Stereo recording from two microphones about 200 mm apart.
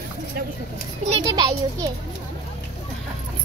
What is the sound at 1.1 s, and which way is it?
Speech, 20° right (ahead or behind).